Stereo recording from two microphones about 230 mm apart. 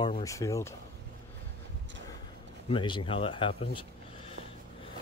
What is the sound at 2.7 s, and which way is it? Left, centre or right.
Speech, left.